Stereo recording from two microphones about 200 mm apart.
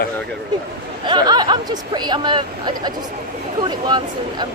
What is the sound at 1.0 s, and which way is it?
Speech, 20° right (ahead or behind).